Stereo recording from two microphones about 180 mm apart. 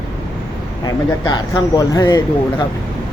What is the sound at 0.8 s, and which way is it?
A man's voice, 20° left (ahead or behind).